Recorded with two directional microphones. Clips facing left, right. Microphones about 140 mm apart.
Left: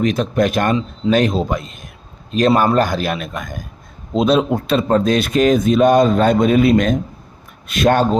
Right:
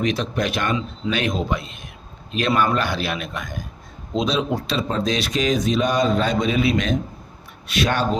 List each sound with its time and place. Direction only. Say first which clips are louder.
0.0 s speech: left 6 dB; 45° left (ahead or behind)